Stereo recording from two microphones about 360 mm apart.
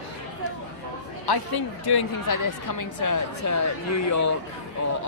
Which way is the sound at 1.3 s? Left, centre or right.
Left.